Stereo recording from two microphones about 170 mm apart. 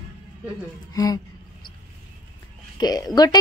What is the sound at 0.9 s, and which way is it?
Speech, 20° left (ahead or behind).